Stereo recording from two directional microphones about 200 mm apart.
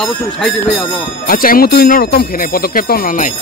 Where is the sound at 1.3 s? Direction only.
45° left (ahead or behind).